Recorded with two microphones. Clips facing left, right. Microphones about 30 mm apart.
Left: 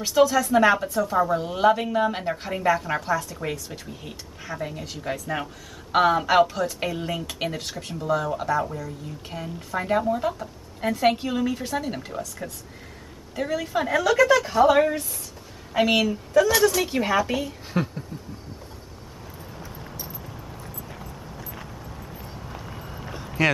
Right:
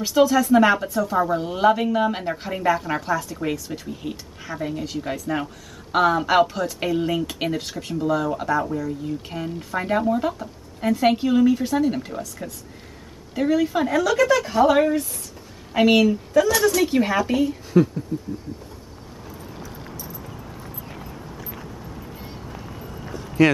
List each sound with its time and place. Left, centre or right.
0.0 s speech: centre
18.1 s a sound: centre
19.7 s vehicle: centre
21.1 s vehicle: centre
21.8 s a sound: centre
22.1 s run: right
22.4 s run: centre
23.4 s speech: centre